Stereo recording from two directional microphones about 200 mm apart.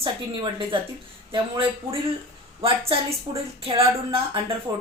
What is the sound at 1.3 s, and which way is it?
A woman's voice, 25° right (ahead or behind).